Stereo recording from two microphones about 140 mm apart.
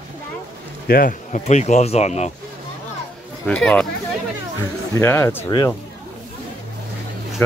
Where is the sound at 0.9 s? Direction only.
80° left.